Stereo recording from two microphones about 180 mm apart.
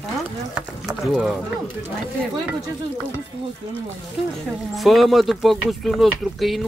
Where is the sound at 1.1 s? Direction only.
5° right (ahead or behind).